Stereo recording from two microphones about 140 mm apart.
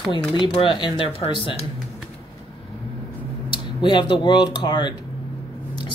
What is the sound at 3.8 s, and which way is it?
Speech, 35° left (ahead or behind).